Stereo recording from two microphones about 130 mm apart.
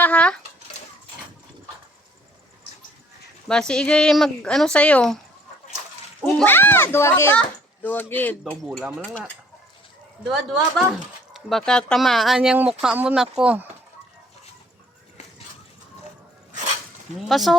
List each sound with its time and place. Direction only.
0.0 s a sound: 10° left (ahead or behind)
3.4 s speech: 5° left (ahead or behind)
6.4 s a child's voice: 15° left (ahead or behind)
8.6 s speech: 5° right (ahead or behind)
9.0 s speech: 10° left (ahead or behind)
10.2 s speech: centre (ahead or behind)
17.2 s speech: centre (ahead or behind)